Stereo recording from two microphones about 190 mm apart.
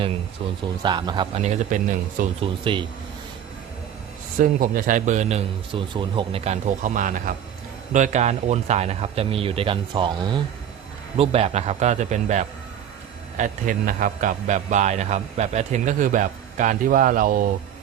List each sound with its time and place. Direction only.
0.4 s speech: 30° right (ahead or behind)
1.4 s a man's voice: 35° right (ahead or behind)
2.4 s speech: 25° right (ahead or behind)
4.4 s a man's voice: 50° right (ahead or behind)